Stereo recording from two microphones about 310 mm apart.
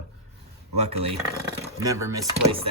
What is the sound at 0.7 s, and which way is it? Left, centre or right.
Speech, centre.